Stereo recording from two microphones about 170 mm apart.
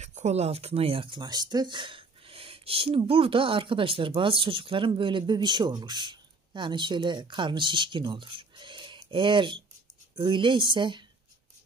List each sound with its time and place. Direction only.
0.0 s speech: 40° right (ahead or behind)